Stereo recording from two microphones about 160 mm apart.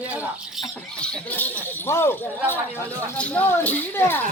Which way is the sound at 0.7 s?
10° left (ahead or behind).